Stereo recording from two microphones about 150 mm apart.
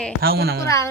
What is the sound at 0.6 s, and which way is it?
Chime, 20° left (ahead or behind).